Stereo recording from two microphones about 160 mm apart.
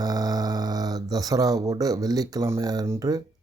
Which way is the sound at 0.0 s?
25° right (ahead or behind).